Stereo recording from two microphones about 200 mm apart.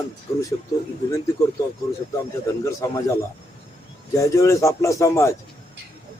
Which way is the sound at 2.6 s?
15° left (ahead or behind).